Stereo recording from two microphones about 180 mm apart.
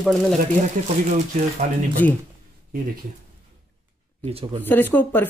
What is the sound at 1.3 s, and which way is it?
Speech, 45° right (ahead or behind).